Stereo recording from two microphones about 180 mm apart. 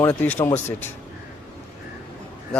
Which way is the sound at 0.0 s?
10° left (ahead or behind).